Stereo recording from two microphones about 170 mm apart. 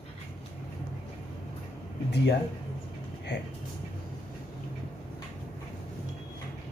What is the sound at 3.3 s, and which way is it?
Speech, 85° left.